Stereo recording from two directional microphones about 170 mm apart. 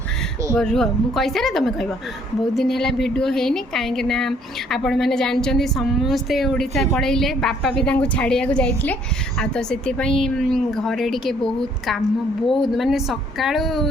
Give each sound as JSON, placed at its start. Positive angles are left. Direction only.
{"t": 0.5, "sound": "a woman's voice", "side_deg": 5}